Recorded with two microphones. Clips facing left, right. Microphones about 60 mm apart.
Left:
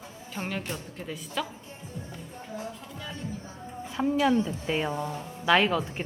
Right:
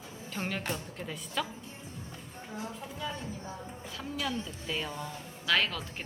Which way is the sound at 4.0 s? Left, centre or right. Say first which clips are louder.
Left 12 dB; left.